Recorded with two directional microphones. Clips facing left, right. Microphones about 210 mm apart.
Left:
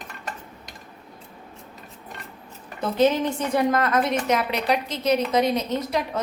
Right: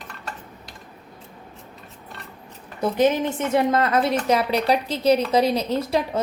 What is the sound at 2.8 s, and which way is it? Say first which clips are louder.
A woman's voice: right 1 dB; 15° right (ahead or behind).